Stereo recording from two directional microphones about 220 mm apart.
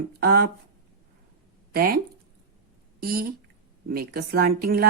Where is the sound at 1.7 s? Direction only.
40° right (ahead or behind).